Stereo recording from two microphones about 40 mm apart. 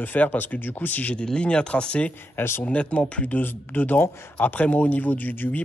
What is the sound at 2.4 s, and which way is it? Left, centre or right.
Speech, left.